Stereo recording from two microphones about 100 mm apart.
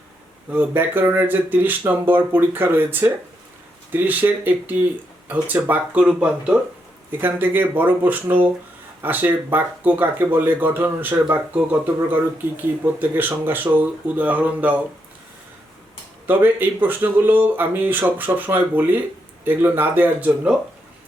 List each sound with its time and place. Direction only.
0.5 s speech: 20° right (ahead or behind)
16.2 s speech: 20° right (ahead or behind)